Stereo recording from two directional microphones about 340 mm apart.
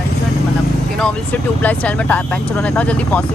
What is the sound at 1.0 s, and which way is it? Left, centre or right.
Speech, centre.